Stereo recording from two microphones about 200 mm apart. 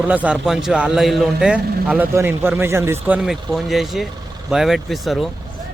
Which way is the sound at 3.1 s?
Centre (ahead or behind).